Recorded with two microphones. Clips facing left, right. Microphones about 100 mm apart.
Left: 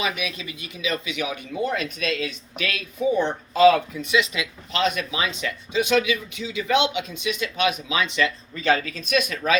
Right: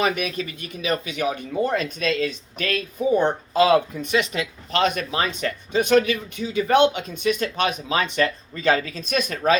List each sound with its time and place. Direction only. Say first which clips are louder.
0.0 s speech: right 5 dB; 50° right (ahead or behind)